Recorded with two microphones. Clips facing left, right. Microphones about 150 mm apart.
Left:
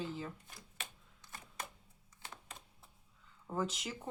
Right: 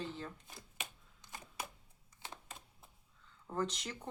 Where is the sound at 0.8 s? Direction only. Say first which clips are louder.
Right 2 dB; 15° right (ahead or behind).